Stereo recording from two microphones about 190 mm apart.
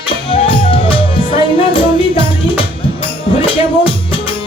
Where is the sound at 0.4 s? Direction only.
30° left (ahead or behind).